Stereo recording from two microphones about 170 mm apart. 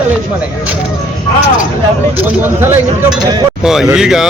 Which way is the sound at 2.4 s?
15° right (ahead or behind).